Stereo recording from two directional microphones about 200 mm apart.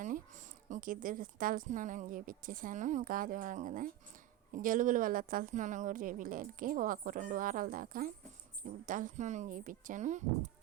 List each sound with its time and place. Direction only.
0.0 s a woman's voice: 40° right (ahead or behind)